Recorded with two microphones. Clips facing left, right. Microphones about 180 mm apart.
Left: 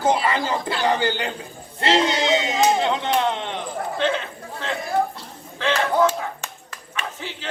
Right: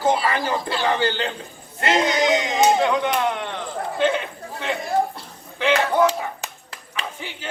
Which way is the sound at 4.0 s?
10° right (ahead or behind).